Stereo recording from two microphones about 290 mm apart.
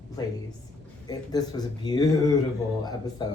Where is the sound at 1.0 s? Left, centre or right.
Centre.